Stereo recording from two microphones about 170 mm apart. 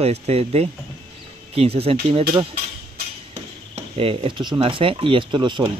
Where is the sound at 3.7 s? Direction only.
35° right (ahead or behind).